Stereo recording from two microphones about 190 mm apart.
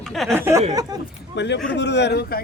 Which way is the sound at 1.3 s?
65° left (ahead or behind).